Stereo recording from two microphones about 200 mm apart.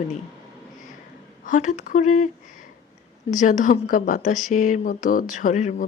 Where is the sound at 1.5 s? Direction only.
40° left (ahead or behind).